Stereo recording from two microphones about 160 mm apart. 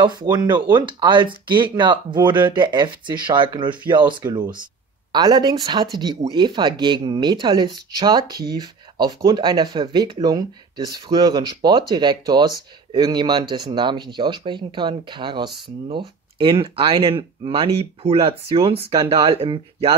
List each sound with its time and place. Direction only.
0.0 s speech: 25° right (ahead or behind)